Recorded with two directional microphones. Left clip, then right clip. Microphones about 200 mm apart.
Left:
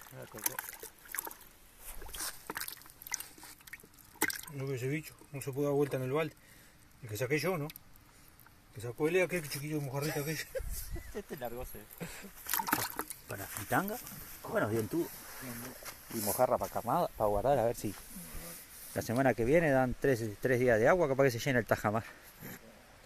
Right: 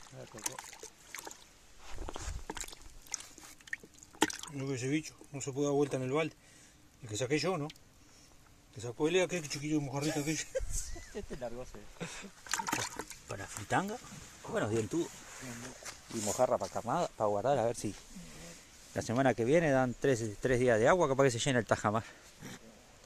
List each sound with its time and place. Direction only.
0.2 s speech: 15° left (ahead or behind)
4.4 s speech: centre (ahead or behind)
8.8 s speech: 5° left (ahead or behind)
11.2 s speech: 25° left (ahead or behind)
12.0 s a sound: 5° right (ahead or behind)
13.7 s speech: 10° right (ahead or behind)
15.8 s a sound: 15° left (ahead or behind)
16.2 s speech: centre (ahead or behind)